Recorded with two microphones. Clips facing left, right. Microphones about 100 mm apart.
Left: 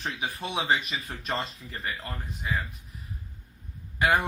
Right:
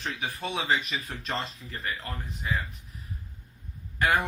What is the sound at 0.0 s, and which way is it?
Speech, 15° left (ahead or behind).